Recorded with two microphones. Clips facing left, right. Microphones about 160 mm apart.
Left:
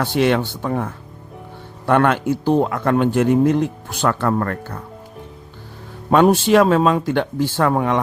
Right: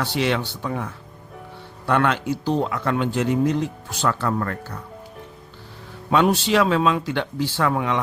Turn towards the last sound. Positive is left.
turn(degrees=45)  # may be behind; listen again after turning